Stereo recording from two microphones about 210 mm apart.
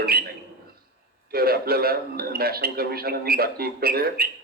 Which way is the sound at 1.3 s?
45° right (ahead or behind).